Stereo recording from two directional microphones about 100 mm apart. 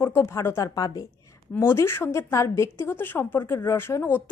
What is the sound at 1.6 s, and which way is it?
A woman's voice, 25° left (ahead or behind).